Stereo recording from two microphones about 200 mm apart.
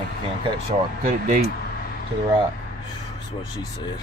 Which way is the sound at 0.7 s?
40° right (ahead or behind).